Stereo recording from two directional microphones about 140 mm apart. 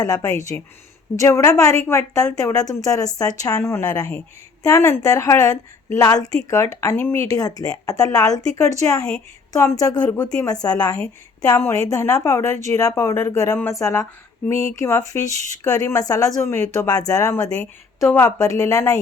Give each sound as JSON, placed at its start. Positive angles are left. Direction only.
{"t": 0.0, "sound": "a woman's voice", "side_deg": 25}